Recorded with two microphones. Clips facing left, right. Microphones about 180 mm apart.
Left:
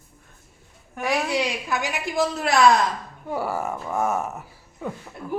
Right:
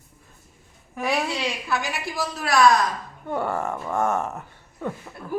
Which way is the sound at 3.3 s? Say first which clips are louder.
Right 1 dB; 5° left (ahead or behind).